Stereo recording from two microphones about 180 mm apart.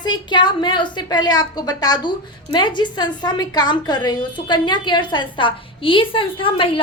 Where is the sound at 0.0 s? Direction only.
25° left (ahead or behind).